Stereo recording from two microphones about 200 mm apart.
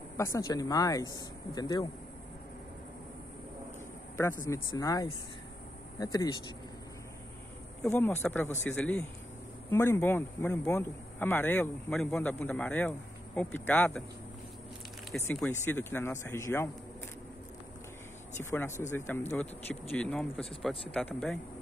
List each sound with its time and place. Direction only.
0.2 s a man's voice: 15° left (ahead or behind)
4.2 s a man's voice: 15° left (ahead or behind)
7.8 s a man's voice: 10° left (ahead or behind)
15.0 s a man's voice: 5° left (ahead or behind)
18.4 s a man's voice: 15° left (ahead or behind)